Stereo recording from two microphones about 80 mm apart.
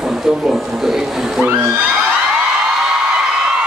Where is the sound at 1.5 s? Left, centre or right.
Right.